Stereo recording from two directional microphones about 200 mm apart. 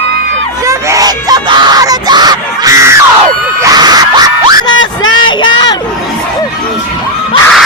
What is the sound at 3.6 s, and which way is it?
Screaming, 20° right (ahead or behind).